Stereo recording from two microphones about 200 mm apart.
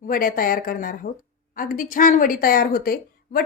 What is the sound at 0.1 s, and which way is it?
A woman's voice, 45° left (ahead or behind).